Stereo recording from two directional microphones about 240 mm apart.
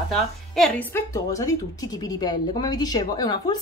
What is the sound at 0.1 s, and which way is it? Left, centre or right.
A woman's voice, centre.